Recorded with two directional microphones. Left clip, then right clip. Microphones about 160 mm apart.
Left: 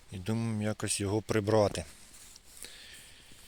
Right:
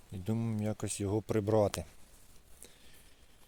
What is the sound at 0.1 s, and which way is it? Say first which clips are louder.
Speech: left 2 dB; 5° right (ahead or behind).